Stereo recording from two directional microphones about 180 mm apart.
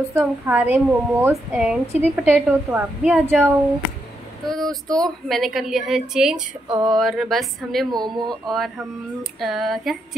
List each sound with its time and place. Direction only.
0.1 s speech: 10° right (ahead or behind)
4.5 s a woman's voice: centre (ahead or behind)
6.7 s speech: 25° right (ahead or behind)
7.0 s a woman's voice: centre (ahead or behind)
7.9 s speech: 25° right (ahead or behind)
8.5 s a woman's voice: centre (ahead or behind)